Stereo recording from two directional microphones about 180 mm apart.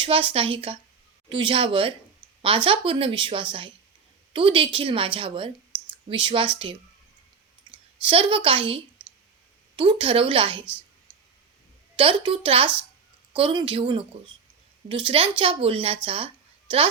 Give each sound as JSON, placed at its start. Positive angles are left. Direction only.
{"t": 0.0, "sound": "a woman's voice", "side_deg": -30}
{"t": 8.0, "sound": "a woman's voice", "side_deg": -30}
{"t": 11.9, "sound": "a woman's voice", "side_deg": -30}